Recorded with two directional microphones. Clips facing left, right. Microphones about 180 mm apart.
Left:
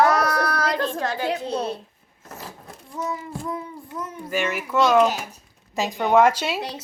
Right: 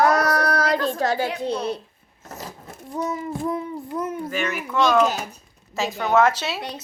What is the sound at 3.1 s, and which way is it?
Child singing, 25° right (ahead or behind).